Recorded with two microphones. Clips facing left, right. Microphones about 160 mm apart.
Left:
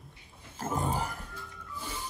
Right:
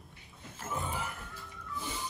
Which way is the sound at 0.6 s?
40° left (ahead or behind).